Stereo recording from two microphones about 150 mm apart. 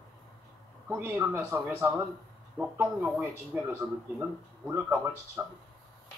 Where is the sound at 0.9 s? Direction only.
15° right (ahead or behind).